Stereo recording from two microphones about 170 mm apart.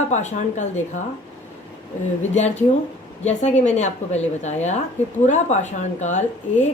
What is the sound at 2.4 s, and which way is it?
A woman's voice, 40° left (ahead or behind).